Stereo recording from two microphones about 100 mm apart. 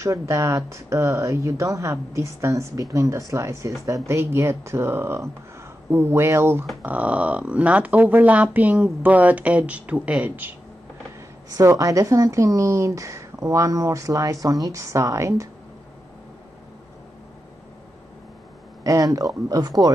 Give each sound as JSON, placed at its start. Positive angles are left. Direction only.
{"t": 0.0, "sound": "speech", "side_deg": -30}
{"t": 6.8, "sound": "speech", "side_deg": -15}
{"t": 11.5, "sound": "speech", "side_deg": -35}
{"t": 18.9, "sound": "speech", "side_deg": -35}